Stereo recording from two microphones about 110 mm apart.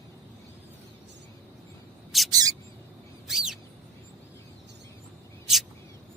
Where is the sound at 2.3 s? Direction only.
35° right (ahead or behind).